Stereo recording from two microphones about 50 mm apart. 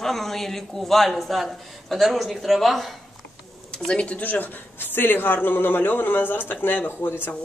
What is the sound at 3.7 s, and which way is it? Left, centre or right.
Speech, centre.